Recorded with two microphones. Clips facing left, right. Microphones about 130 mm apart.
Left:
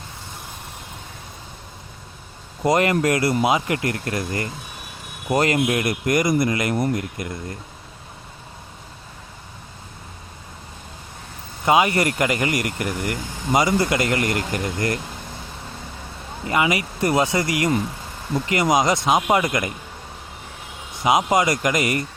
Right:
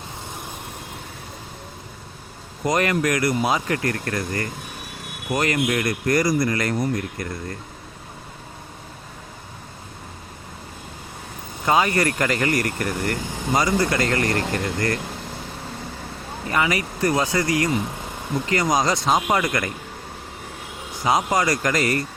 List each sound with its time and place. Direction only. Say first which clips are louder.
2.6 s speech: left 3 dB; 25° left (ahead or behind)
11.6 s speech: left 2 dB; 20° left (ahead or behind)
16.5 s speech: left 2 dB; 20° left (ahead or behind)
21.0 s speech: left 2 dB; 20° left (ahead or behind)